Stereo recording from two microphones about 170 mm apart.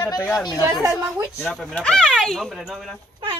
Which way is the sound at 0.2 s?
5° left (ahead or behind).